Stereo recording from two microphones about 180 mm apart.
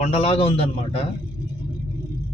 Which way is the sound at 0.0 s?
35° left (ahead or behind).